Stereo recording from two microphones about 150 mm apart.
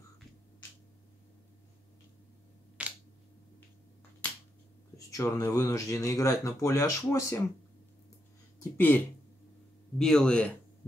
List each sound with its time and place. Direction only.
4.9 s speech: 20° left (ahead or behind)
8.7 s speech: 10° left (ahead or behind)